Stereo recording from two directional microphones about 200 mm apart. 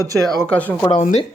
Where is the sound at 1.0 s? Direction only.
35° left (ahead or behind).